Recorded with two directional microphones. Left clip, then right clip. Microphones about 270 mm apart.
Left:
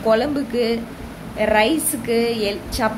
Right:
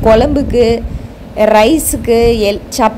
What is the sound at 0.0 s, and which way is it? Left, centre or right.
A woman's voice, right.